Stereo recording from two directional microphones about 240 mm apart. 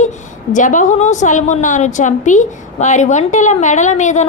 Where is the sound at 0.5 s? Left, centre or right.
Left.